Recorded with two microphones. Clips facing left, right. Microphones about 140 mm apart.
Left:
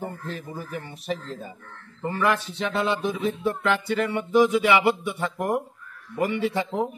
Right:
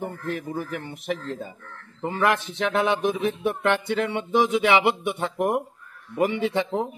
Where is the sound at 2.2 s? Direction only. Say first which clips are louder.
Right 2 dB; 20° right (ahead or behind).